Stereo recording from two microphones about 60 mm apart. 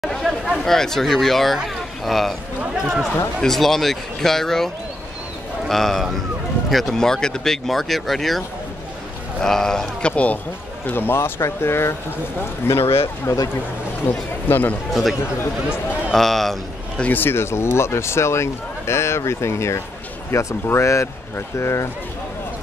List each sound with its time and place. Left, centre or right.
0.0 s speech: centre
3.3 s speech: centre
5.7 s speech: centre
10.1 s speech: left
10.9 s speech: left
14.1 s speech: left
16.1 s a man's voice: centre
17.1 s speech: left